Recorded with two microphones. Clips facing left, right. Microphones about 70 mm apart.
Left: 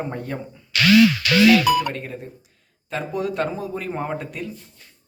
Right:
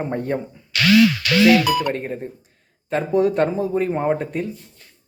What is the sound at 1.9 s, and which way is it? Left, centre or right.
Speech, right.